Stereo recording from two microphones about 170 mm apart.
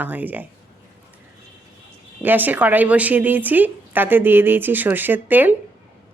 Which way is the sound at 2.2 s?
10° right (ahead or behind).